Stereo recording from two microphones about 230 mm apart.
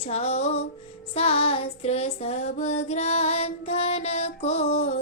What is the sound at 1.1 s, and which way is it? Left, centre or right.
Child singing, left.